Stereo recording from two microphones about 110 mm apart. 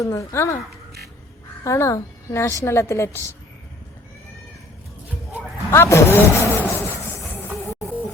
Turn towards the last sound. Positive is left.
turn(degrees=15)  # may be behind; listen again after turning